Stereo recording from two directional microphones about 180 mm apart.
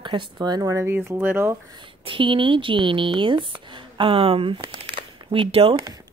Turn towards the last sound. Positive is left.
turn(degrees=-30)  # may be behind; listen again after turning